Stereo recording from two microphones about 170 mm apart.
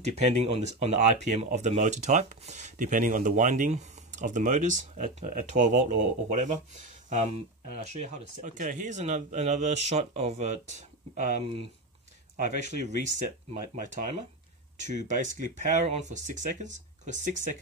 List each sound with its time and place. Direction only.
0.0 s speech: 40° right (ahead or behind)
12.5 s speech: 45° right (ahead or behind)